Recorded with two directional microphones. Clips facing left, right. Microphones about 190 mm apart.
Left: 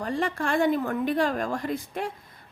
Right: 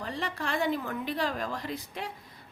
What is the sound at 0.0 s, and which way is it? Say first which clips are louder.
A woman's voice: left 7 dB; 50° left (ahead or behind).